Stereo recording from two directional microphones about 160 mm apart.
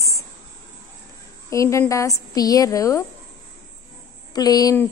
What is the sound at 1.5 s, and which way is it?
A woman's voice, 20° left (ahead or behind).